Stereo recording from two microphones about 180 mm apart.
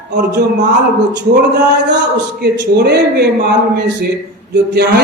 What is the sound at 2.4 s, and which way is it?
Speech, 65° right (ahead or behind).